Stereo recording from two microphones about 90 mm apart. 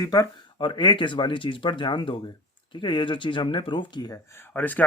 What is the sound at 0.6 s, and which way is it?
Speech, 60° left (ahead or behind).